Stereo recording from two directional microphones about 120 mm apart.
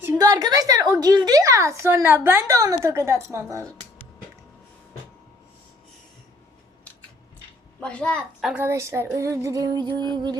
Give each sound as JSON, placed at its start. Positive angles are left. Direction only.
{"t": 0.2, "sound": "a woman's voice", "side_deg": -30}
{"t": 7.8, "sound": "a woman's voice", "side_deg": 10}
{"t": 8.5, "sound": "a woman's voice", "side_deg": -20}